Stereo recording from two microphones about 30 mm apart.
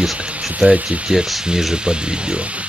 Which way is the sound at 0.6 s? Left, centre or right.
Right.